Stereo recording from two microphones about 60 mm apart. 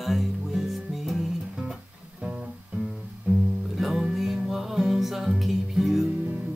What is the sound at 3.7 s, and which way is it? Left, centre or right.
Music, centre.